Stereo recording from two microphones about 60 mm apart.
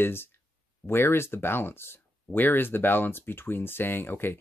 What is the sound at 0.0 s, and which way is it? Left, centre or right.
Speech, left.